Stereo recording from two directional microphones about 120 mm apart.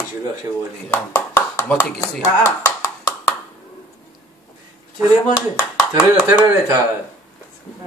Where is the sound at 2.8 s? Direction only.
25° left (ahead or behind).